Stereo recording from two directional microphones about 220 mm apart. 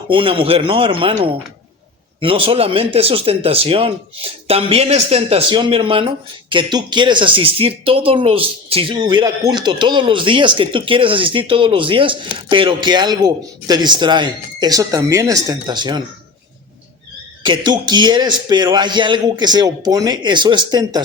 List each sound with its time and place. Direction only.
0.1 s speech: 25° right (ahead or behind)
17.4 s speech: 20° right (ahead or behind)